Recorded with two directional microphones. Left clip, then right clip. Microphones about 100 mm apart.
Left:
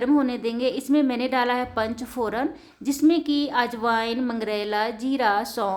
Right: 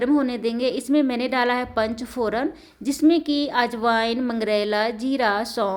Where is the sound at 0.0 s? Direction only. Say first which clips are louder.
Right 1 dB; 25° right (ahead or behind).